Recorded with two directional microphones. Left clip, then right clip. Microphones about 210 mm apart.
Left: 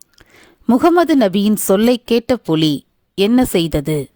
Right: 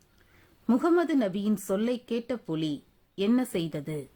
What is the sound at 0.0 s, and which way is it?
A woman's voice, 45° left (ahead or behind).